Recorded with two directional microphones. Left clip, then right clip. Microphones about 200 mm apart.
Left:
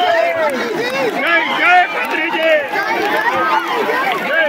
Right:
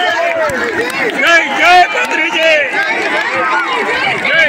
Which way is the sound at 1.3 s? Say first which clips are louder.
Right 5 dB; 40° right (ahead or behind).